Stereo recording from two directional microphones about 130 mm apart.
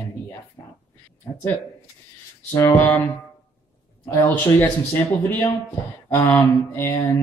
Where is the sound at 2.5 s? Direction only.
25° left (ahead or behind).